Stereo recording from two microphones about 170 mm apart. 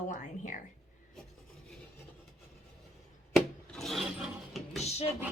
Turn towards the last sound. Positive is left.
turn(degrees=40)  # may be behind; listen again after turning